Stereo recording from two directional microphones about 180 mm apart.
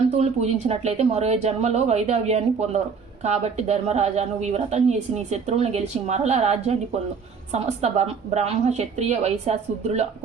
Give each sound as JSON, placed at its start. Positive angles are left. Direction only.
{"t": 0.2, "sound": "a woman's voice", "side_deg": -40}